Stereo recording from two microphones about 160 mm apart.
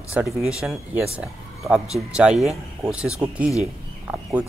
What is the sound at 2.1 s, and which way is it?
Speech, 5° right (ahead or behind).